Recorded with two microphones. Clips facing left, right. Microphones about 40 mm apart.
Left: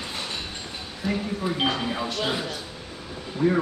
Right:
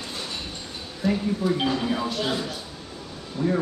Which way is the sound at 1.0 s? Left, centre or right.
Centre.